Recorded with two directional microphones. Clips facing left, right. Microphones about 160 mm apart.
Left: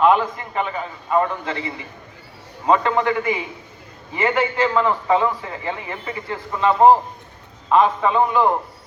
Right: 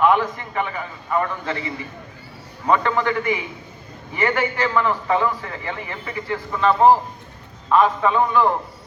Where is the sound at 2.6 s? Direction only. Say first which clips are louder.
Left 2 dB; 25° left (ahead or behind).